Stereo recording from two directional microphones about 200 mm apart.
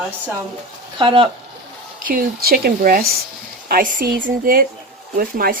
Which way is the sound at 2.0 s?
45° right (ahead or behind).